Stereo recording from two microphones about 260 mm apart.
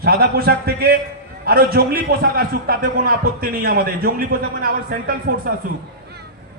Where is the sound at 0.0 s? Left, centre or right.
Right.